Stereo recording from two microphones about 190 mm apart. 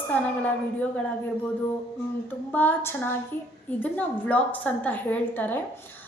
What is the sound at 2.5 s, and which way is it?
A woman's voice, 10° left (ahead or behind).